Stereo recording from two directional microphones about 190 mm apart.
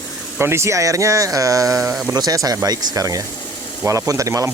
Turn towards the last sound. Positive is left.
turn(degrees=-15)  # may be behind; listen again after turning